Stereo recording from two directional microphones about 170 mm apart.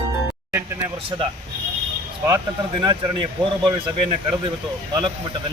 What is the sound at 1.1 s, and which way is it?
Speech, 25° right (ahead or behind).